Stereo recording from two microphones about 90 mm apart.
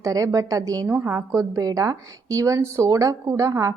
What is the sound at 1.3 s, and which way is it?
A woman's voice, 40° right (ahead or behind).